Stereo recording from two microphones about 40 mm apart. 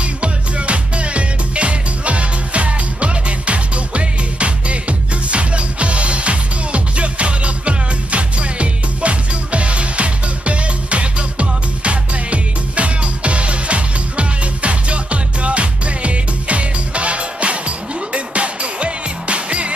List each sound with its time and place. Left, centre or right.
0.0 s music: right